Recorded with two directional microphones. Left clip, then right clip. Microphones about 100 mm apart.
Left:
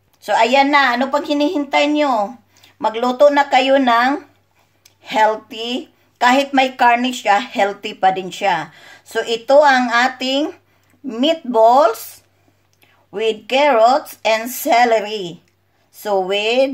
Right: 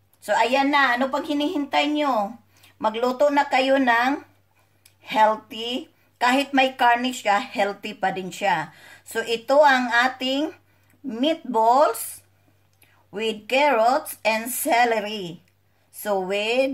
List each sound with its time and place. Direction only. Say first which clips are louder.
0.2 s a woman's voice: left 7 dB; 40° left (ahead or behind)